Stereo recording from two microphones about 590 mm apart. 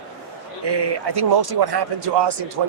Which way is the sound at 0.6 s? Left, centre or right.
Right.